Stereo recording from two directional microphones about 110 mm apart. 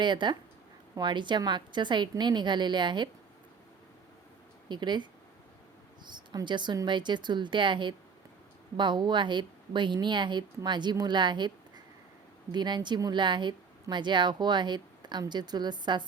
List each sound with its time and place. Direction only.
0.0 s speech: 45° right (ahead or behind)
4.7 s speech: 45° right (ahead or behind)
6.1 s speech: 45° right (ahead or behind)